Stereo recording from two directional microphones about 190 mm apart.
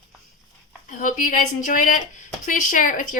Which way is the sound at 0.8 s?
45° left (ahead or behind).